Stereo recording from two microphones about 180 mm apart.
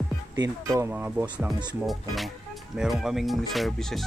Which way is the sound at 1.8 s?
Centre (ahead or behind).